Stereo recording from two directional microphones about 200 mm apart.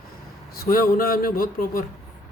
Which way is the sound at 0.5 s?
45° left (ahead or behind).